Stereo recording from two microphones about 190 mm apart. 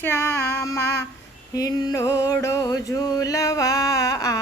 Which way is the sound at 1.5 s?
20° left (ahead or behind).